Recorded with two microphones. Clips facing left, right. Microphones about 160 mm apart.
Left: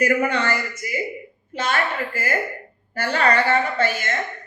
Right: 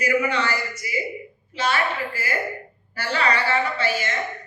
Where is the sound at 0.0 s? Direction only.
50° left (ahead or behind).